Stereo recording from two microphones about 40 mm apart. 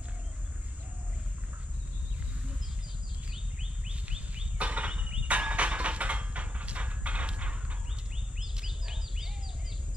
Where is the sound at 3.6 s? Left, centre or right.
Right.